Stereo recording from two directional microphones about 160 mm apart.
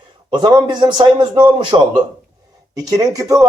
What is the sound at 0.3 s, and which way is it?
A man's voice, 25° right (ahead or behind).